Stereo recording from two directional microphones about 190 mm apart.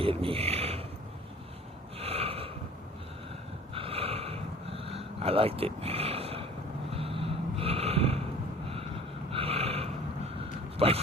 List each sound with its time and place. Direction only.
0.0 s a sound: 30° right (ahead or behind)
2.0 s snort: 30° right (ahead or behind)
3.8 s a sound: 30° right (ahead or behind)
6.9 s snort: 30° right (ahead or behind)
9.3 s snort: 30° right (ahead or behind)
10.8 s speech: 30° right (ahead or behind)